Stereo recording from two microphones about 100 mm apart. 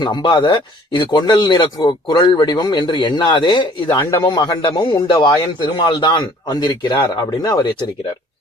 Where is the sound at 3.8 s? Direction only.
30° left (ahead or behind); by 7.9 s 50° left (ahead or behind).